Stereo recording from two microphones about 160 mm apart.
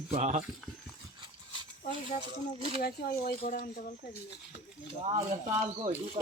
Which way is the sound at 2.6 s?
35° right (ahead or behind).